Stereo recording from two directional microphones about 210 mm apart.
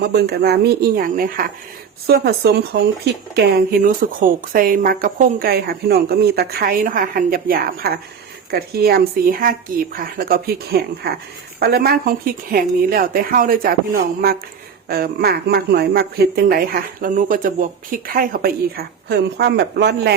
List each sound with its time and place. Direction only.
0.0 s speech: 50° right (ahead or behind)